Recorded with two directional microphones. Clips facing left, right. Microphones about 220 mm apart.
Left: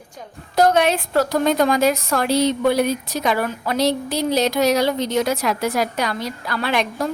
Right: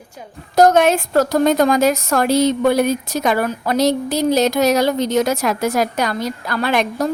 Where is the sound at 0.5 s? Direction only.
45° right (ahead or behind).